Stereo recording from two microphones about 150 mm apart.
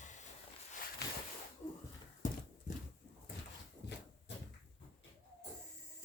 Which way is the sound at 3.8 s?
90° left.